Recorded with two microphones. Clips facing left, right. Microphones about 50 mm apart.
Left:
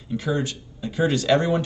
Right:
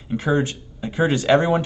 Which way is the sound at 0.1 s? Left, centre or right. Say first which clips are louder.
Right 4 dB; right.